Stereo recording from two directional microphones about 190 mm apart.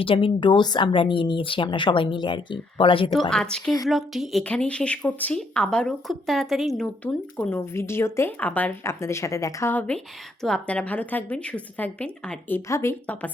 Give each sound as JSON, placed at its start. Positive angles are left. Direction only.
{"t": 0.0, "sound": "speech", "side_deg": 30}
{"t": 3.1, "sound": "a woman's voice", "side_deg": 0}